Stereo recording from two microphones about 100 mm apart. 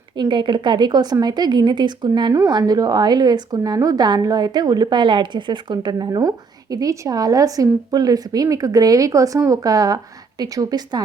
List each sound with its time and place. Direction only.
0.2 s a woman's voice: 50° right (ahead or behind)